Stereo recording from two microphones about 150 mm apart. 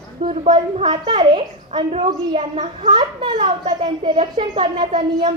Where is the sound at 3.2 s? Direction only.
35° right (ahead or behind).